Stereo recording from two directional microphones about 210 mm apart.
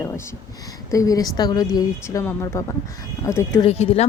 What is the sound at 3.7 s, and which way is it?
Speech, 30° left (ahead or behind).